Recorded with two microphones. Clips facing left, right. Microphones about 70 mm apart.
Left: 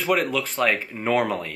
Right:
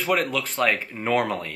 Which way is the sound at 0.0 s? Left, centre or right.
Centre.